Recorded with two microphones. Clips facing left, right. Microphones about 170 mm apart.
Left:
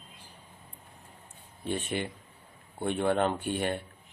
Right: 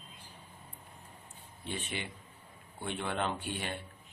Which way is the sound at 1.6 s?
50° left (ahead or behind).